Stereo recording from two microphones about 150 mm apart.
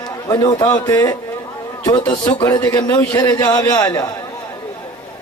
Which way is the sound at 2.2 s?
25° left (ahead or behind).